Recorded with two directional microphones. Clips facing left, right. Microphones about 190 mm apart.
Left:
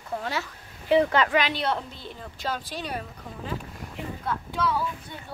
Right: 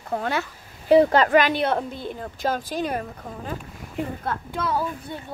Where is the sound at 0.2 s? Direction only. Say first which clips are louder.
Right 5 dB; 55° right (ahead or behind).